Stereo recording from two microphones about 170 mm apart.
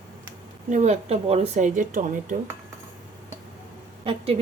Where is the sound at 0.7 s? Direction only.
40° right (ahead or behind).